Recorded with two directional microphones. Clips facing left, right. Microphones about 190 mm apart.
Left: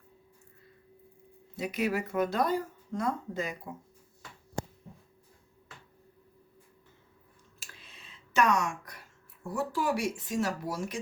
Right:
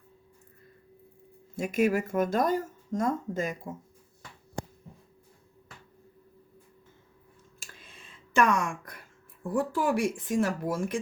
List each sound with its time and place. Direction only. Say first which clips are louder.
1.5 s speech: right 5 dB; 45° right (ahead or behind)
7.6 s a sound: right 2 dB; 50° right (ahead or behind)
9.5 s speech: right 3 dB; 50° right (ahead or behind)